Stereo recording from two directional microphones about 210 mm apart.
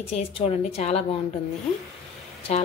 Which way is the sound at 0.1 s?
30° left (ahead or behind).